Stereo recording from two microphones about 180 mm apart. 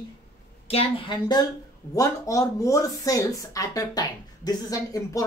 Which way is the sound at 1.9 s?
20° left (ahead or behind).